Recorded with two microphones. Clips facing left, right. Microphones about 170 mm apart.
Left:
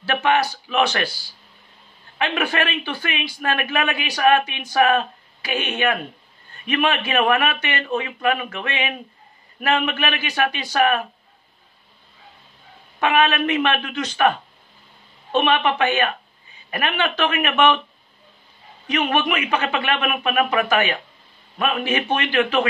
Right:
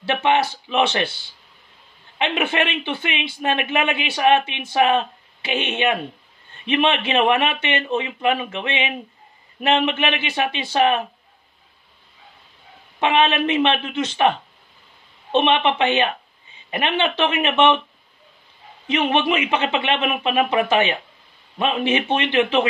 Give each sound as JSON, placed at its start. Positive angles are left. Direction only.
{"t": 0.0, "sound": "a man's voice", "side_deg": -20}
{"t": 13.0, "sound": "a man's voice", "side_deg": -25}
{"t": 15.3, "sound": "a man's voice", "side_deg": -25}
{"t": 18.9, "sound": "a man's voice", "side_deg": -25}